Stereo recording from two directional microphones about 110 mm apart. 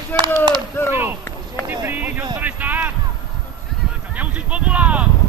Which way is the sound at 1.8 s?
15° right (ahead or behind).